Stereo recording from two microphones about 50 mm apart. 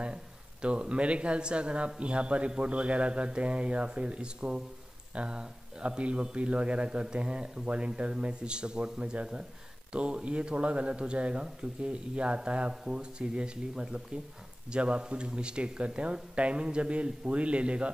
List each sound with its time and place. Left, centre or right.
0.0 s a man's voice: right